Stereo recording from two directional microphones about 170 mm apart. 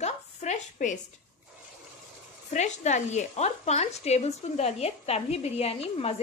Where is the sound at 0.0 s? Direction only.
45° left (ahead or behind).